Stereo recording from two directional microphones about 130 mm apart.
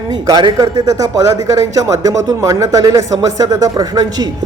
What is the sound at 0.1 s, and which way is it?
A man's voice, 35° right (ahead or behind).